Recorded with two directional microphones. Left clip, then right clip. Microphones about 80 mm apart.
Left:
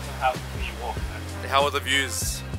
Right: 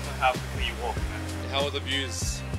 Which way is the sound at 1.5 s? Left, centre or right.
Left.